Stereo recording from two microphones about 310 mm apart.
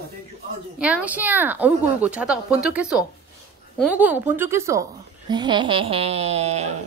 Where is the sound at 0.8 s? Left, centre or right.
Centre; by 6.7 s right.